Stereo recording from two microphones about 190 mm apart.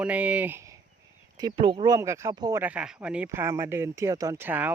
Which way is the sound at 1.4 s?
25° right (ahead or behind).